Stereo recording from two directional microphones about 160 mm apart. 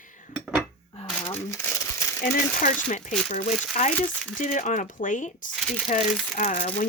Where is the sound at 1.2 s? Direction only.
20° left (ahead or behind).